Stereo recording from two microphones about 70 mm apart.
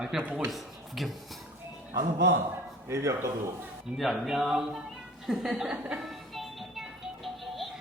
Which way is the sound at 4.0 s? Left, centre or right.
Centre.